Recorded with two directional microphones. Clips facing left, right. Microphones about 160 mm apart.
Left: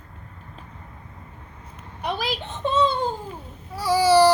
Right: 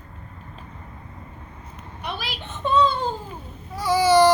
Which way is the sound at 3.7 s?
35° left (ahead or behind).